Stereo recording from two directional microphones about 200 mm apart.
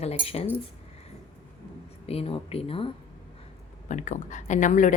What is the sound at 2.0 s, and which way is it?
Speech, 30° left (ahead or behind).